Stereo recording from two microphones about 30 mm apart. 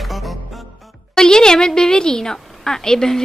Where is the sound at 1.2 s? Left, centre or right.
Left.